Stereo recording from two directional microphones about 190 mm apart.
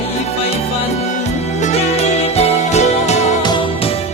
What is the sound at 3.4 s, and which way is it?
Music, 25° left (ahead or behind).